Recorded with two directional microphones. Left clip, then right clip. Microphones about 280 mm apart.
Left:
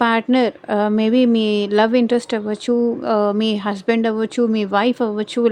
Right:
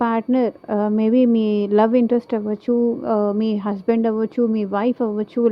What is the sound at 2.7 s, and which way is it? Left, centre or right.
Speech, left.